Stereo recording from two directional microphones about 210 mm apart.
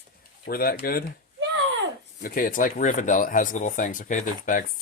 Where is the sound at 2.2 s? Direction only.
40° left (ahead or behind).